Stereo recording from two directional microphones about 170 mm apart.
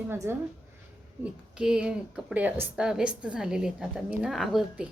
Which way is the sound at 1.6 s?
5° right (ahead or behind).